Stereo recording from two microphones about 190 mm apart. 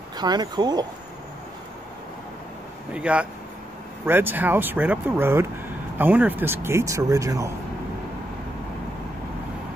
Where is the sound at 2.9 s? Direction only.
5° right (ahead or behind).